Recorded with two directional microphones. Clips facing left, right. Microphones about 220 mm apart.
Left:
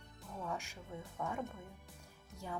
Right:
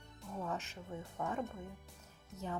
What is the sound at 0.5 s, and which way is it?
Speech, 10° left (ahead or behind).